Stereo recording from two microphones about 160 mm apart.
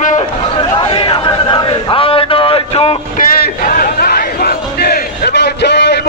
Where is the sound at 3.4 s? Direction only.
60° left (ahead or behind).